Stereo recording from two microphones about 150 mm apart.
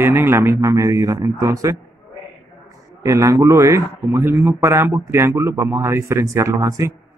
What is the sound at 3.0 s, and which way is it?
A man's voice, 20° right (ahead or behind).